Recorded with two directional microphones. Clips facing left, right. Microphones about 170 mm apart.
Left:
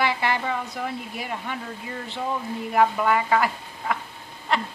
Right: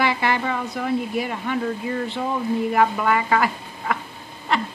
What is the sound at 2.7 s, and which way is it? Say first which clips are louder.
Speech: left 2 dB; 85° right.